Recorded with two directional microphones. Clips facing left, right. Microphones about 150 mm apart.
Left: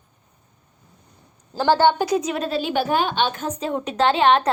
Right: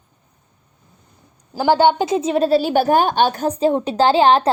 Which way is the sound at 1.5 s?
10° right (ahead or behind).